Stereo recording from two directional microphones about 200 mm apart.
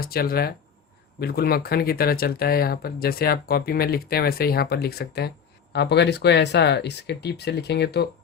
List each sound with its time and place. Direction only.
0.0 s speech: 50° left (ahead or behind)